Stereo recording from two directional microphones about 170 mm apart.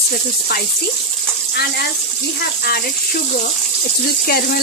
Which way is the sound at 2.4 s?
65° left (ahead or behind).